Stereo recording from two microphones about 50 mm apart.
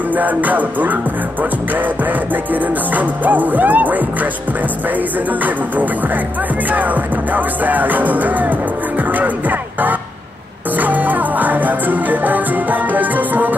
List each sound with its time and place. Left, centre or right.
0.1 s music: right
2.5 s music: right
6.7 s music: right